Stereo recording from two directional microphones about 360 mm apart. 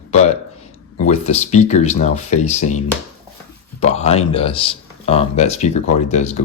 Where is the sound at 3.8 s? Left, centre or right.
Centre.